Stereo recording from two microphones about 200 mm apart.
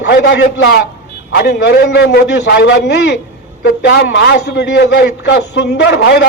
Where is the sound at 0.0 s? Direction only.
60° left (ahead or behind).